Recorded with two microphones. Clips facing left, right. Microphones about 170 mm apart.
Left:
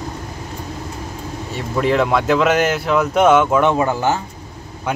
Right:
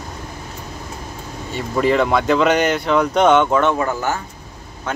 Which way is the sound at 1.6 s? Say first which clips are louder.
Right 1 dB; centre (ahead or behind).